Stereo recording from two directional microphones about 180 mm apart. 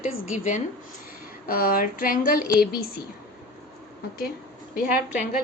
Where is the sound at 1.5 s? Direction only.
50° left (ahead or behind).